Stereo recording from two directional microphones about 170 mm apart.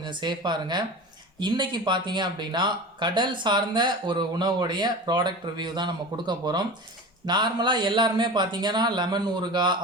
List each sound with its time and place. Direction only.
0.0 s speech: 25° right (ahead or behind)